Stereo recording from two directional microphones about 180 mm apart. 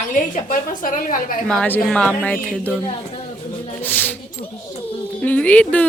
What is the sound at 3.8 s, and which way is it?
Speech, 10° left (ahead or behind).